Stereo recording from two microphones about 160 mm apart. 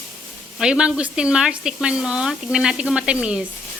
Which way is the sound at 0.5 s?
5° right (ahead or behind).